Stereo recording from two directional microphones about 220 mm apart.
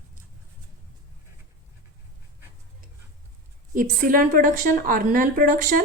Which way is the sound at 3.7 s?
40° right (ahead or behind).